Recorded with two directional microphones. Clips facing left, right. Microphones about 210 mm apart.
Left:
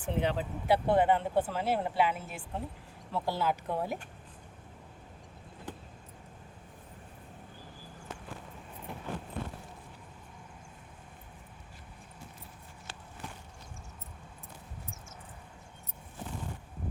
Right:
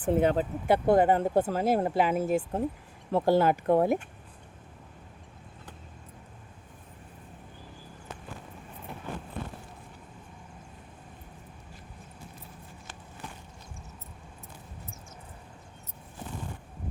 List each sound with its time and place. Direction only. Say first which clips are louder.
0.0 s speech: right 7 dB; 50° right (ahead or behind)